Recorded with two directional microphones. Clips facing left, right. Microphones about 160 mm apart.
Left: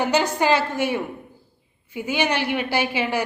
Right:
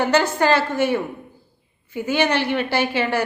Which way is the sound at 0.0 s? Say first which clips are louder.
Right 2 dB; 10° left (ahead or behind).